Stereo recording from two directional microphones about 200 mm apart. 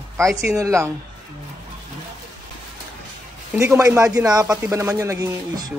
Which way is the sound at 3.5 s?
15° right (ahead or behind).